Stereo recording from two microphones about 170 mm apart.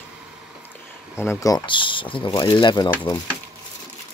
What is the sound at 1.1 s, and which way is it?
Speech, 15° left (ahead or behind).